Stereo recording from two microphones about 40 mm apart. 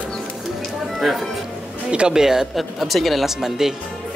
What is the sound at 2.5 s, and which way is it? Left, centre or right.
Speech, centre.